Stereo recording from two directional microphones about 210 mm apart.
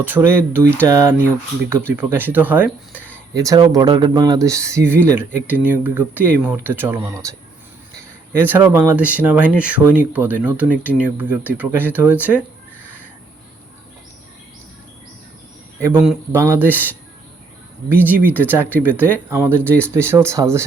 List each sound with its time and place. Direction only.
0.0 s speech: 10° right (ahead or behind)
2.9 s a sound: 10° left (ahead or behind)
3.3 s speech: 15° right (ahead or behind)
8.4 s speech: 10° right (ahead or behind)
15.8 s speech: 10° right (ahead or behind)